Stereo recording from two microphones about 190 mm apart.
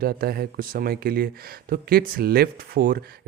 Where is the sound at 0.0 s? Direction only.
55° right (ahead or behind).